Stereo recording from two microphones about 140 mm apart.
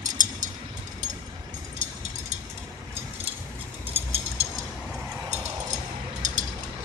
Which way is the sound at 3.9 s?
45° right (ahead or behind).